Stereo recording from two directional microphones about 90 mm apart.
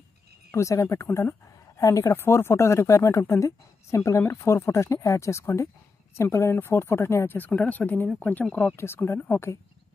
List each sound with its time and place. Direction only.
0.5 s speech: 35° left (ahead or behind)
2.1 s speech: 25° left (ahead or behind)